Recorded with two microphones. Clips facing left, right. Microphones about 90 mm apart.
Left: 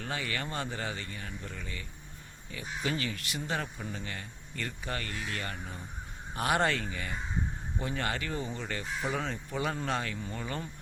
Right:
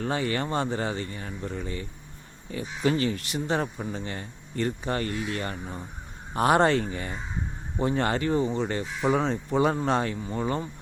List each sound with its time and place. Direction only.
0.0 s speech: 35° right (ahead or behind)